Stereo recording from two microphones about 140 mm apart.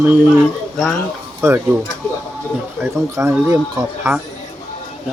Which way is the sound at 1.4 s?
15° right (ahead or behind).